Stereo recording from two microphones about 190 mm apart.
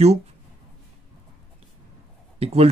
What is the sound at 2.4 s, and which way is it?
Speech, 30° right (ahead or behind).